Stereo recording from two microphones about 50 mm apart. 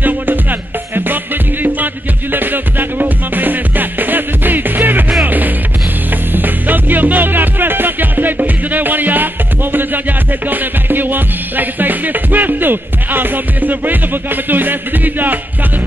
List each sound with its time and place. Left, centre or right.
0.0 s music: right